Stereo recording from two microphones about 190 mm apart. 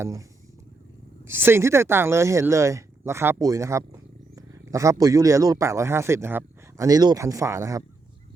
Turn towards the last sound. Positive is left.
turn(degrees=-15)  # may be behind; listen again after turning